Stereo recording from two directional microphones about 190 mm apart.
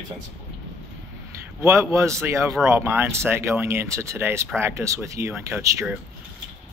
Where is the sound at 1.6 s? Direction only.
15° right (ahead or behind).